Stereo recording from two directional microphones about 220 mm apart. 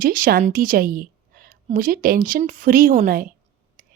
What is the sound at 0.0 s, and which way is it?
A woman's voice, 40° right (ahead or behind).